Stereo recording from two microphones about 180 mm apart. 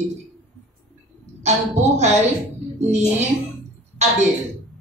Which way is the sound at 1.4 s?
40° right (ahead or behind).